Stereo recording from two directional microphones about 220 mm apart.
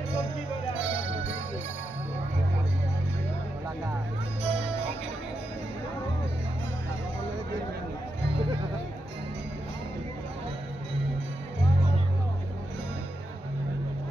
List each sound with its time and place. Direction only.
4.4 s music: 30° right (ahead or behind)